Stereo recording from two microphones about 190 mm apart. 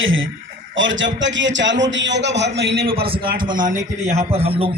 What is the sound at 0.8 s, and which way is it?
A man's voice, 80° right.